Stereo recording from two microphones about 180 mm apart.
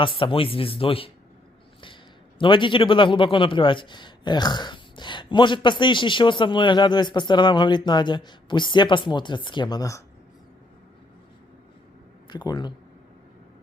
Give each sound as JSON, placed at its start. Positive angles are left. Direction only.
{"t": 0.0, "sound": "speech", "side_deg": 30}
{"t": 2.4, "sound": "a man's voice", "side_deg": 25}
{"t": 12.3, "sound": "a man's voice", "side_deg": 25}